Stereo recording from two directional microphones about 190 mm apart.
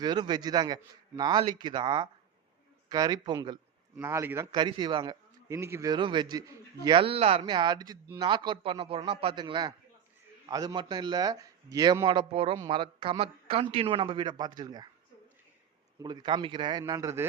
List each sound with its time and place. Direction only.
0.0 s speech: 20° right (ahead or behind)
4.5 s speech: 25° right (ahead or behind)
16.0 s speech: 20° right (ahead or behind)